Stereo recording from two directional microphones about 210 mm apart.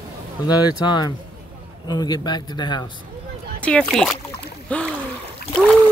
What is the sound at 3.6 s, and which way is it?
Speech, 5° left (ahead or behind).